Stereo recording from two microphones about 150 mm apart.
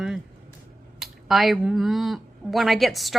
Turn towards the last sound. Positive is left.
turn(degrees=0)  # may be behind; listen again after turning